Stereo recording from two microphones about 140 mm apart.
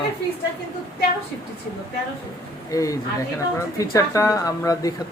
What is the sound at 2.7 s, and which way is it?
Speech, 25° left (ahead or behind).